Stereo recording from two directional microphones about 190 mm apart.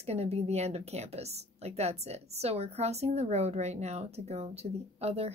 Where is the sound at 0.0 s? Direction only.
35° right (ahead or behind).